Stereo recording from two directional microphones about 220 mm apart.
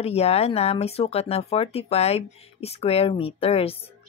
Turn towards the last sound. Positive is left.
turn(degrees=25)  # may be behind; listen again after turning